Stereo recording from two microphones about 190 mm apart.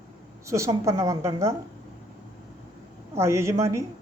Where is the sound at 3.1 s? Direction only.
15° right (ahead or behind).